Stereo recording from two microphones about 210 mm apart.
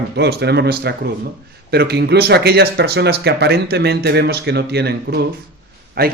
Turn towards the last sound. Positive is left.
turn(degrees=-45)  # may be behind; listen again after turning